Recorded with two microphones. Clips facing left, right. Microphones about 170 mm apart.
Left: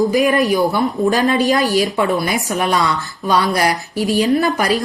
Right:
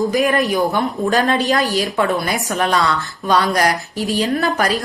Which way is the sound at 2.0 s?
10° left (ahead or behind).